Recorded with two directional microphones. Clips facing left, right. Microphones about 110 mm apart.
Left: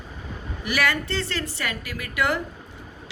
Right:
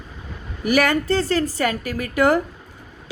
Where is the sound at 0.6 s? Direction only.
45° right (ahead or behind).